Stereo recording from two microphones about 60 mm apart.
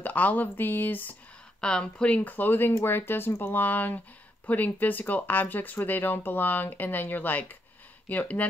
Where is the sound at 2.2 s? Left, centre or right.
Left.